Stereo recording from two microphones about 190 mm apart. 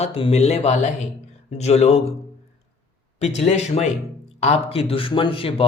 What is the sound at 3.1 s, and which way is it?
Speech, 35° left (ahead or behind).